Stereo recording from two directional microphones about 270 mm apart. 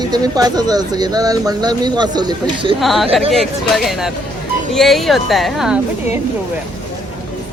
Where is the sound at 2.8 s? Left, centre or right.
Centre.